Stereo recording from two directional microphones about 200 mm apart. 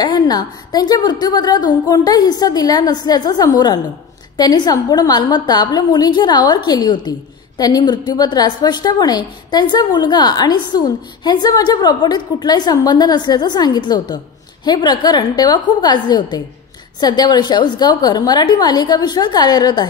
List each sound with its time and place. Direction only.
0.0 s a woman's voice: 20° left (ahead or behind)